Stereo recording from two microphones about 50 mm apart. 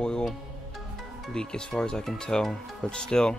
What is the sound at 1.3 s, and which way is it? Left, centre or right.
Speech, centre.